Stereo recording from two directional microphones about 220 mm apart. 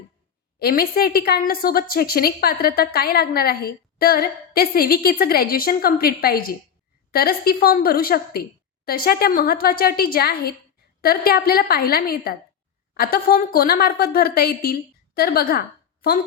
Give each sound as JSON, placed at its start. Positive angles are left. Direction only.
{"t": 0.6, "sound": "a woman's voice", "side_deg": 45}